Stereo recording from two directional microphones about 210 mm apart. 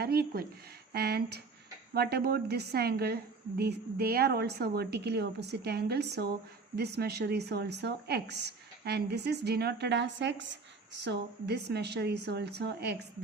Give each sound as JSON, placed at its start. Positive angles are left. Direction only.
{"t": 0.0, "sound": "speech", "side_deg": -45}